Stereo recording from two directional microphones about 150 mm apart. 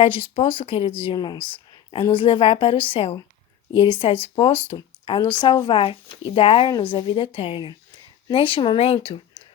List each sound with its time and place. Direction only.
0.0 s speech: 35° left (ahead or behind)